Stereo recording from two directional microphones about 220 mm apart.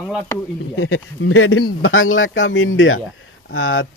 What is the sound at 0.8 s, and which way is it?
Speech, 70° left (ahead or behind).